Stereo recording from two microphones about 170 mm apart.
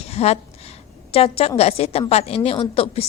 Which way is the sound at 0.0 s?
40° left (ahead or behind).